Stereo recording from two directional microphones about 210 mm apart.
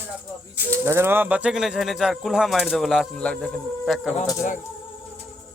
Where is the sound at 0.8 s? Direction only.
10° right (ahead or behind).